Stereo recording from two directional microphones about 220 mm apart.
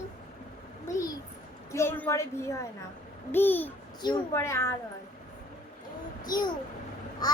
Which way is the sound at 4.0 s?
20° left (ahead or behind).